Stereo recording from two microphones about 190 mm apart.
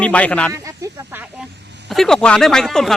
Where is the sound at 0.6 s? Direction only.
15° right (ahead or behind).